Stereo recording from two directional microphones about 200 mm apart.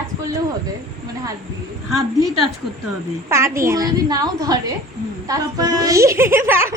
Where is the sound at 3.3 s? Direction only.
15° right (ahead or behind).